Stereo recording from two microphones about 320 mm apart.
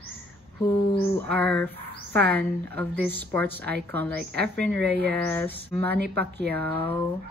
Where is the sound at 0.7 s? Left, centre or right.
Centre.